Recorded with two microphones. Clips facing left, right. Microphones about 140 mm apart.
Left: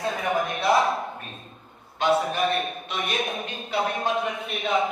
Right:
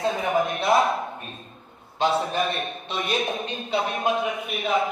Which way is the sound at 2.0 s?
Centre (ahead or behind).